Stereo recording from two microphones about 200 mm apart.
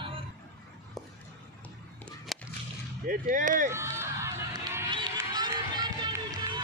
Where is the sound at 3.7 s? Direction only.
15° right (ahead or behind).